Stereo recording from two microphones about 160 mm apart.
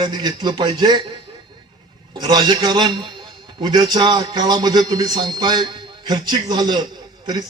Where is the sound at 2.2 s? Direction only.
25° right (ahead or behind).